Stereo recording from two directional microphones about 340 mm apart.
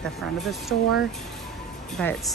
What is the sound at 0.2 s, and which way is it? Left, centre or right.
Speech, centre.